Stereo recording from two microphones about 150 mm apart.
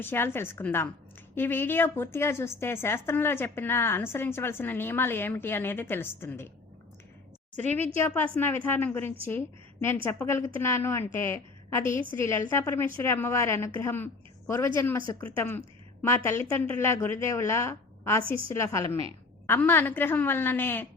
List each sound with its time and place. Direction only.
0.0 s a woman's voice: 15° left (ahead or behind)
7.5 s a woman's voice: 50° right (ahead or behind)
8.0 s a woman's voice: 15° left (ahead or behind)